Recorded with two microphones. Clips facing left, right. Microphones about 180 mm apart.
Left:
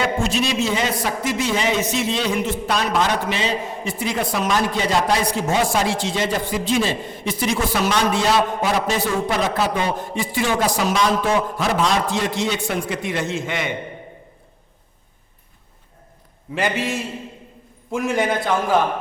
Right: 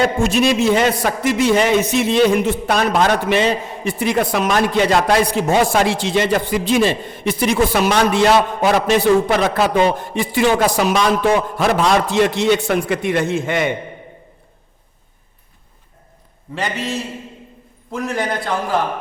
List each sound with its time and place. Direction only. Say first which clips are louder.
0.0 s a man's voice: right 5 dB; 55° right (ahead or behind)
17.9 s a man's voice: left 1 dB; centre (ahead or behind)